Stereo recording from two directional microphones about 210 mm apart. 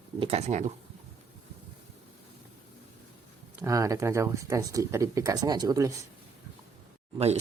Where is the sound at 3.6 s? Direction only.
15° right (ahead or behind).